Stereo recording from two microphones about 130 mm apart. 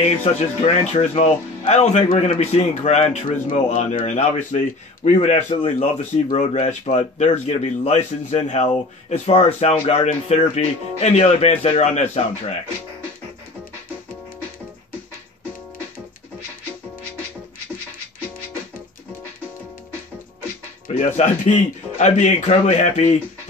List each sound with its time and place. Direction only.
0.2 s speech: 55° left (ahead or behind)
21.2 s speech: 65° left (ahead or behind)